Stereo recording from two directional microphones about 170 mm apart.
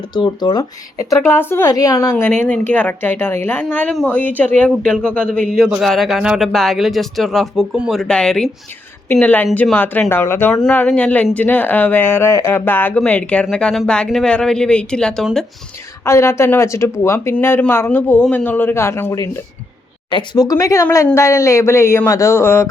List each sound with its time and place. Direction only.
0.1 s a woman's voice: 25° left (ahead or behind); by 15.4 s centre (ahead or behind)
16.0 s speech: 15° left (ahead or behind)
20.1 s a woman's voice: 25° left (ahead or behind)